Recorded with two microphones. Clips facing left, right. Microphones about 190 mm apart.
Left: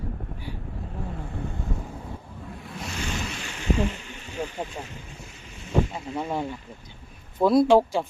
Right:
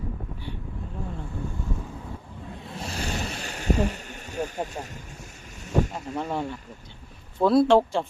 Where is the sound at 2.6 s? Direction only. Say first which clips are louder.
Right 1 dB; 30° right (ahead or behind).